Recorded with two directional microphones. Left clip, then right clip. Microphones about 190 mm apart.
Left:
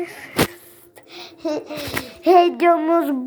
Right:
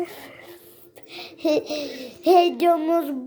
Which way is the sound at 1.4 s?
25° right (ahead or behind).